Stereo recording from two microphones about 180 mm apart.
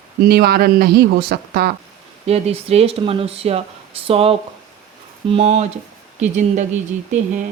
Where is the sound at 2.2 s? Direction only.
35° right (ahead or behind).